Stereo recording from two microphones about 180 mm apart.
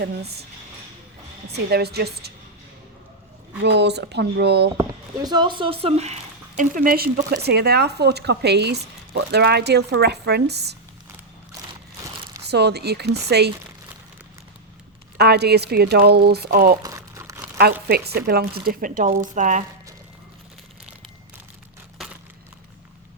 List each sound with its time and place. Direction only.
0.0 s speech: 65° right (ahead or behind)
1.5 s speech: 65° right (ahead or behind)
3.6 s speech: 70° right (ahead or behind)
4.8 s speech: 20° right (ahead or behind)
6.6 s speech: 50° right (ahead or behind)
12.5 s speech: 65° right (ahead or behind)
15.2 s speech: 65° right (ahead or behind)
16.8 s crumpling: 20° right (ahead or behind)
17.8 s speech: 60° right (ahead or behind)